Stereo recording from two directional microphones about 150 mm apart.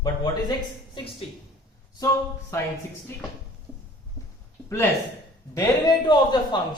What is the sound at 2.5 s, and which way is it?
Speech, 20° left (ahead or behind).